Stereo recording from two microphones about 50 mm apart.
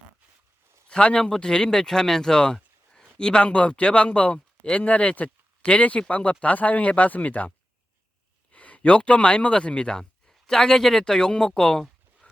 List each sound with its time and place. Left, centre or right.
0.9 s speech: centre
8.5 s speech: left; by 11.9 s centre